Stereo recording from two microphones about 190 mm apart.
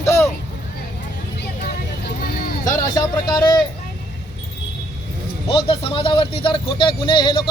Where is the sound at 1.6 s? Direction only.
55° left (ahead or behind).